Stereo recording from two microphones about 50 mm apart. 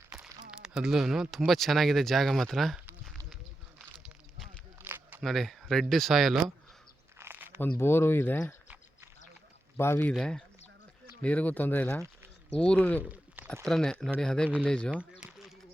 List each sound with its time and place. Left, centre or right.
0.1 s speech: centre
5.2 s speech: centre
7.3 s crumpling: right
7.6 s speech: left
9.7 s speech: left
10.2 s speech: centre
11.2 s speech: left
12.5 s speech: centre
13.1 s a sound: right
13.7 s speech: centre